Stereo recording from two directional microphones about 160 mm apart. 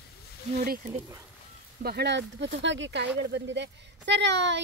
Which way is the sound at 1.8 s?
90° right.